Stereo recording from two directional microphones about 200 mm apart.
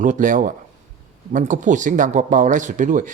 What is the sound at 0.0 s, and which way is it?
Speech, 40° right (ahead or behind).